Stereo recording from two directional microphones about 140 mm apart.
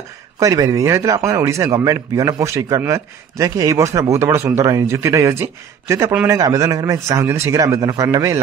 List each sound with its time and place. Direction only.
0.4 s a man's voice: 25° right (ahead or behind)